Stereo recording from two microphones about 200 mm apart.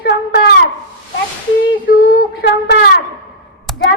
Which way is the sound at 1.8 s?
45° left (ahead or behind).